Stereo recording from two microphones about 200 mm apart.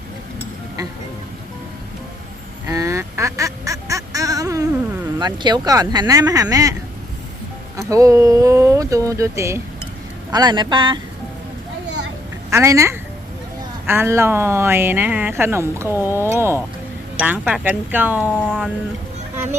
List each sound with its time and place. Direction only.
2.6 s duck: 15° right (ahead or behind)
5.2 s speech: 20° right (ahead or behind)
7.8 s speech: 15° right (ahead or behind)
12.5 s a woman's voice: 15° right (ahead or behind)
18.2 s speech: 5° left (ahead or behind)